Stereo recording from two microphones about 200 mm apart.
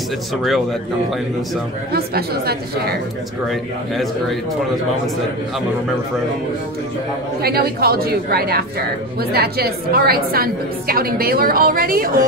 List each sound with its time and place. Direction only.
1.9 s a woman's voice: 50° right (ahead or behind)
3.4 s a man's voice: centre (ahead or behind)
7.4 s a woman's voice: 50° right (ahead or behind)